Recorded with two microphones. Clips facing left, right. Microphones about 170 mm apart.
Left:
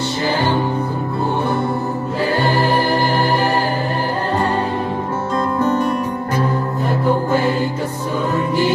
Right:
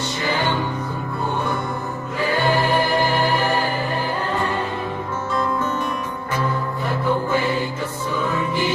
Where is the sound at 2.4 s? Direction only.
35° left (ahead or behind).